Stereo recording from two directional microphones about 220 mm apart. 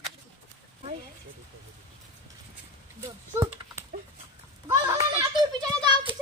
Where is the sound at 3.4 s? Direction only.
10° right (ahead or behind).